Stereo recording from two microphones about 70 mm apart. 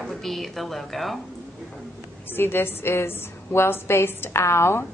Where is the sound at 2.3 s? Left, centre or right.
Left.